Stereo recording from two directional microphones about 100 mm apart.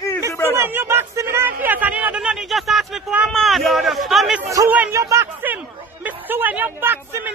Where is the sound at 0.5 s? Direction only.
25° right (ahead or behind); by 4.4 s centre (ahead or behind).